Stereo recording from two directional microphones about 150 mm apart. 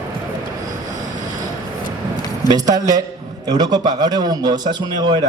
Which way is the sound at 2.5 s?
25° right (ahead or behind).